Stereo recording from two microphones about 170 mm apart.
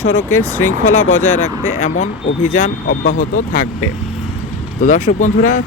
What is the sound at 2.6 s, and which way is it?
Speech, 60° left (ahead or behind).